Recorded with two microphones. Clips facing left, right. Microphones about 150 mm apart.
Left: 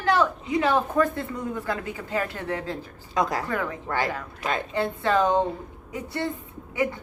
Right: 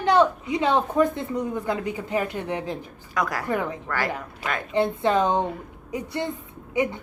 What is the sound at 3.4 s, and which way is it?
Speech, 20° right (ahead or behind).